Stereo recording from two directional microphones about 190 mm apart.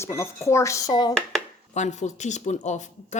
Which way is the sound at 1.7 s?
40° left (ahead or behind).